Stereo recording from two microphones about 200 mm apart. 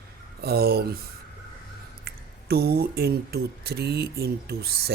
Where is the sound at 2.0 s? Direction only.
50° right (ahead or behind).